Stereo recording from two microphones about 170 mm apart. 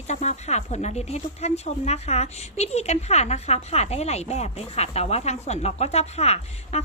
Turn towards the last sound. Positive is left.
turn(degrees=40)  # may be behind; listen again after turning